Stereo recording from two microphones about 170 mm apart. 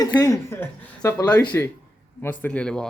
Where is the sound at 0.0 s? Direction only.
20° left (ahead or behind).